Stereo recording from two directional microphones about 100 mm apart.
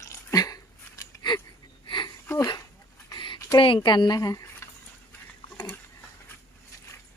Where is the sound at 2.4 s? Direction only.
40° left (ahead or behind).